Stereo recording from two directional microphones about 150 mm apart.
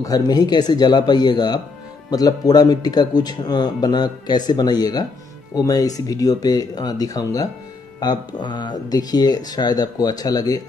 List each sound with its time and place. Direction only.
0.0 s speech: 25° left (ahead or behind)